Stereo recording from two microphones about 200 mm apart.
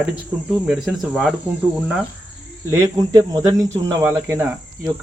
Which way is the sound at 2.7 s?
15° right (ahead or behind).